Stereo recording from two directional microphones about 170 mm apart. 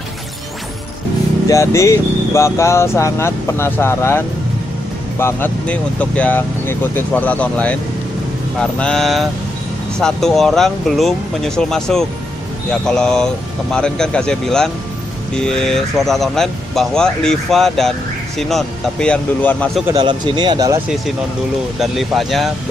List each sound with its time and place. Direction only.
1.5 s speech: 15° left (ahead or behind)
5.2 s speech: 10° left (ahead or behind)
19.9 s speech: 25° right (ahead or behind)
21.7 s speech: centre (ahead or behind)